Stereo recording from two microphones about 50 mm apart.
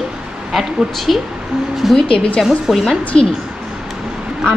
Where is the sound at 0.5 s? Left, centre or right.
Centre.